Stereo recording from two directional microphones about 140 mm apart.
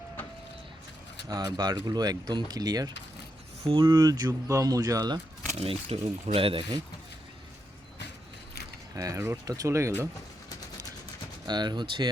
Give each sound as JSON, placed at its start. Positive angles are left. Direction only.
{"t": 1.3, "sound": "speech", "side_deg": -30}
{"t": 3.6, "sound": "speech", "side_deg": -40}
{"t": 3.8, "sound": "speech", "side_deg": -25}
{"t": 5.5, "sound": "speech", "side_deg": -45}
{"t": 9.0, "sound": "speech", "side_deg": -25}
{"t": 11.4, "sound": "speech", "side_deg": -30}